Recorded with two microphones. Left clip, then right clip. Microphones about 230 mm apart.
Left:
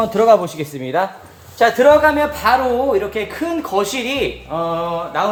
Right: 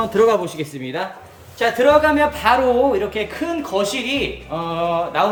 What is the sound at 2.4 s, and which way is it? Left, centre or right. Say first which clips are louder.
Speech: left 2 dB; centre.